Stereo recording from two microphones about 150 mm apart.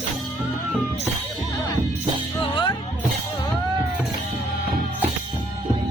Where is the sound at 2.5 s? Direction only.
30° left (ahead or behind).